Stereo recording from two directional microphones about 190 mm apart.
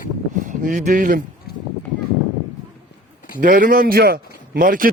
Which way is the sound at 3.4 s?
45° right (ahead or behind).